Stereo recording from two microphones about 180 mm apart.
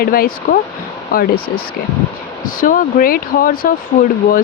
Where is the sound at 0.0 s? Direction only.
55° left (ahead or behind).